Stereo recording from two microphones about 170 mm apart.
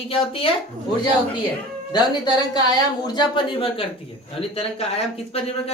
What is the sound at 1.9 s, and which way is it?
A woman's voice, 25° left (ahead or behind).